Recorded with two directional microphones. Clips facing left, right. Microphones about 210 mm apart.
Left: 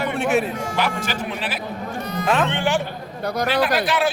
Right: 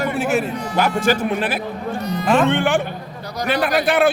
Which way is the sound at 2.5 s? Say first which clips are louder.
Right 4 dB; 55° right (ahead or behind).